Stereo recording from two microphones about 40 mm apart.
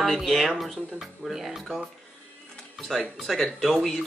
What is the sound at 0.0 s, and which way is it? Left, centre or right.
Speech, centre.